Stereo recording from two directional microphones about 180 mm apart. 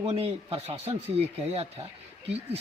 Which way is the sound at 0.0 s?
30° right (ahead or behind).